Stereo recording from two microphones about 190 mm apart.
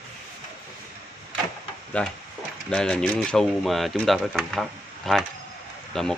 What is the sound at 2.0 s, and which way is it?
Speech, 5° left (ahead or behind).